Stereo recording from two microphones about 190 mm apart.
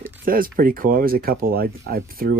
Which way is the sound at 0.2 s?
50° right (ahead or behind).